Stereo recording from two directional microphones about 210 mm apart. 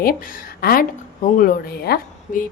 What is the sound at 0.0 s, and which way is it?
A woman's voice, 40° left (ahead or behind).